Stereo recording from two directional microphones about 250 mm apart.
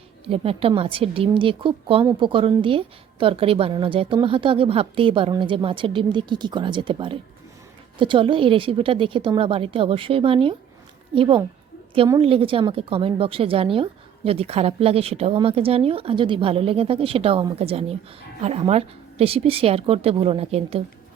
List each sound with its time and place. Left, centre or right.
0.3 s a woman's voice: right